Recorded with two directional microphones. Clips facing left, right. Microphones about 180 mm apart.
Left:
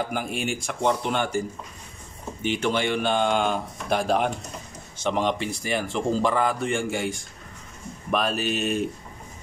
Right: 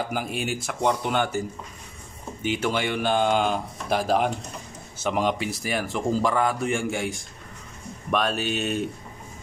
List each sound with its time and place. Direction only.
0.1 s a man's voice: 5° right (ahead or behind)
2.4 s a man's voice: 5° right (ahead or behind)